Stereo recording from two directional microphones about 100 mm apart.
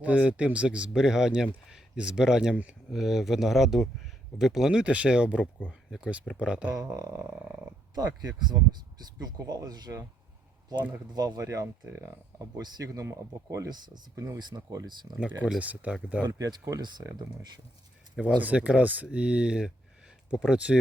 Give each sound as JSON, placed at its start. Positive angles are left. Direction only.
{"t": 0.0, "sound": "speech", "side_deg": -10}
{"t": 6.7, "sound": "speech", "side_deg": -35}
{"t": 11.1, "sound": "speech", "side_deg": -40}
{"t": 13.7, "sound": "speech", "side_deg": -45}
{"t": 15.2, "sound": "speech", "side_deg": -10}
{"t": 16.2, "sound": "speech", "side_deg": -40}
{"t": 18.3, "sound": "speech", "side_deg": -15}